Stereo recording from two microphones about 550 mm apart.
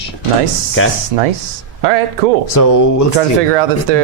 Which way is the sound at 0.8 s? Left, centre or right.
Left.